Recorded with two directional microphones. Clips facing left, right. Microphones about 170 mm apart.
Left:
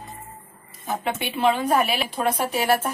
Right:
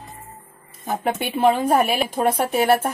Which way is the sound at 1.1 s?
45° right (ahead or behind).